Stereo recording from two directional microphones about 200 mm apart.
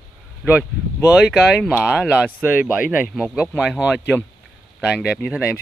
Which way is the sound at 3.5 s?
10° left (ahead or behind).